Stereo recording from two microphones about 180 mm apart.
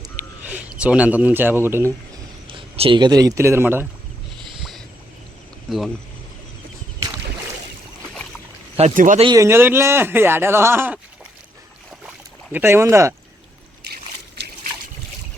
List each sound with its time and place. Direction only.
0.4 s a man's voice: 5° right (ahead or behind)
2.5 s speech: 30° right (ahead or behind); by 3.8 s 10° right (ahead or behind)
5.7 s speech: 5° right (ahead or behind)
9.0 s speech: 45° right (ahead or behind)
9.2 s speech: 20° right (ahead or behind)
12.0 s boat: 10° right (ahead or behind)
13.8 s trickle: 65° right (ahead or behind)